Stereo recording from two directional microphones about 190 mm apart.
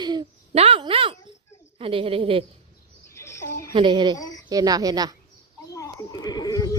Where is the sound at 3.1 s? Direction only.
15° left (ahead or behind).